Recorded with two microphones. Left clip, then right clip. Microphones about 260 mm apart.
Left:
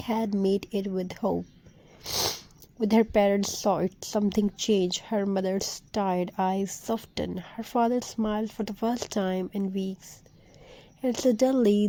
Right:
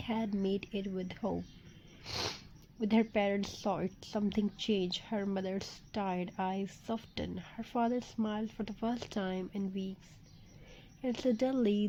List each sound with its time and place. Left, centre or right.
0.0 s speech: left